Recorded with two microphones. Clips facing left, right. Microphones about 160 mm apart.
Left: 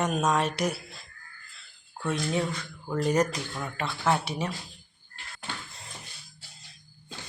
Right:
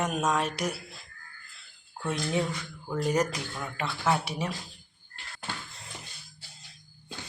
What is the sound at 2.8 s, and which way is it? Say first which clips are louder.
Speech: left 2 dB; 5° right (ahead or behind).